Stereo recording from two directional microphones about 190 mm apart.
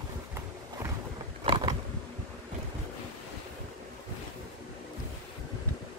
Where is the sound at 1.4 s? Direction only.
20° right (ahead or behind).